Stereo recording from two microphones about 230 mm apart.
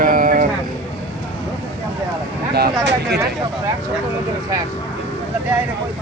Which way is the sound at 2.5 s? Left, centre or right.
Right.